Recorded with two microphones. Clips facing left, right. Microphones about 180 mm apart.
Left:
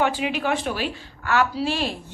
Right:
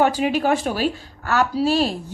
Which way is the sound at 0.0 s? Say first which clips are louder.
Right 5 dB; 40° right (ahead or behind).